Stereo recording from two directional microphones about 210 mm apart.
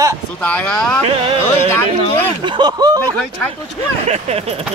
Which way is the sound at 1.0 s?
25° right (ahead or behind).